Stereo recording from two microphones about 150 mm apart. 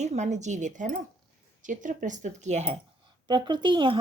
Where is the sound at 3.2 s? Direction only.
30° right (ahead or behind).